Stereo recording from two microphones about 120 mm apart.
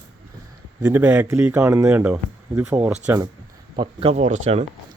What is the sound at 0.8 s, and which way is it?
Speech, 10° right (ahead or behind).